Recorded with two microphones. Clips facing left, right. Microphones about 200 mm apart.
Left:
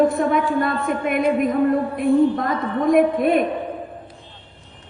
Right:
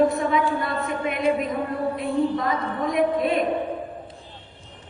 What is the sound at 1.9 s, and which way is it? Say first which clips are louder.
A woman's voice: left 5 dB; 50° left (ahead or behind).